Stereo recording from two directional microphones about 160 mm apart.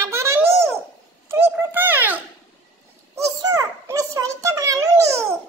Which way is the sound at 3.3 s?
20° right (ahead or behind).